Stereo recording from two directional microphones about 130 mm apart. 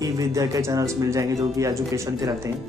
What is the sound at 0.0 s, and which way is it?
Speech, 25° right (ahead or behind).